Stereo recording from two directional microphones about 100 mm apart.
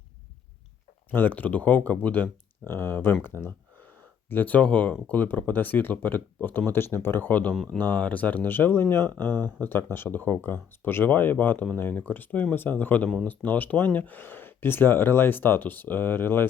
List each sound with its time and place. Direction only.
1.1 s speech: 15° left (ahead or behind)
7.5 s speech: centre (ahead or behind)
7.8 s speech: 15° left (ahead or behind)